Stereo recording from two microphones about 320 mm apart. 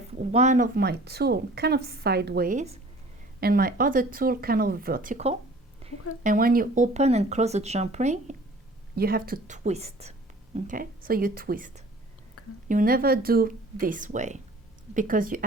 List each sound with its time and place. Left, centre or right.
0.1 s a woman's voice: right
5.8 s a sound: centre
6.2 s a woman's voice: right